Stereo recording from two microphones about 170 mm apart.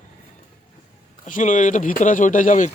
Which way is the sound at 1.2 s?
50° left (ahead or behind).